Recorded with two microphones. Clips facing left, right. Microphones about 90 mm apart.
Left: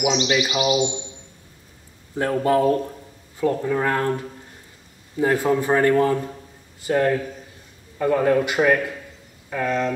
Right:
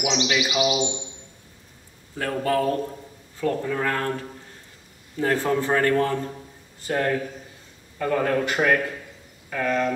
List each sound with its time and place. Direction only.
0.3 s a man's voice: 10° left (ahead or behind)
2.1 s a man's voice: 25° left (ahead or behind); by 9.9 s 5° left (ahead or behind)